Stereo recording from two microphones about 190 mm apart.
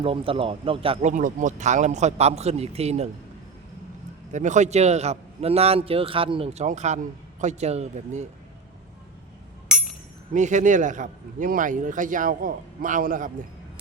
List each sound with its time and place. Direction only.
0.0 s speech: 30° right (ahead or behind)
1.1 s a man's voice: 40° right (ahead or behind)
4.3 s a man's voice: 40° right (ahead or behind)
9.7 s a sound: 5° right (ahead or behind)
10.3 s a man's voice: 40° right (ahead or behind)